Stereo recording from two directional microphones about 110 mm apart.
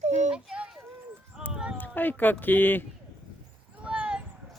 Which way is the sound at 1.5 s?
10° right (ahead or behind).